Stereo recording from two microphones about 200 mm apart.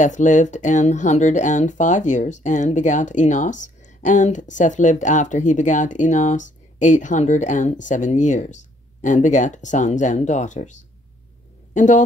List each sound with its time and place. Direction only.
0.0 s speech: 40° left (ahead or behind)